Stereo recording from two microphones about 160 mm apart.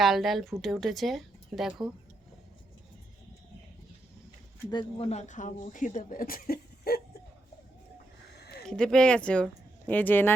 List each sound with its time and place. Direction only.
0.0 s speech: centre (ahead or behind)
4.7 s speech: 35° left (ahead or behind); by 7.0 s 75° left (ahead or behind)
8.4 s a sound: 90° left
8.6 s speech: 5° left (ahead or behind)